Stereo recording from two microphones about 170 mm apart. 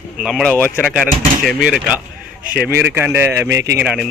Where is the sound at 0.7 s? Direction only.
5° right (ahead or behind).